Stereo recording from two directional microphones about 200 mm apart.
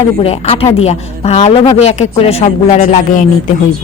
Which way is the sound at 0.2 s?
30° left (ahead or behind).